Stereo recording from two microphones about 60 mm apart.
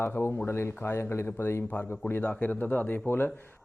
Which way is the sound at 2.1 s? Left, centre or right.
Left.